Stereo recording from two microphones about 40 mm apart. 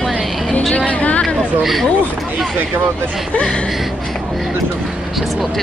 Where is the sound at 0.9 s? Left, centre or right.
Left.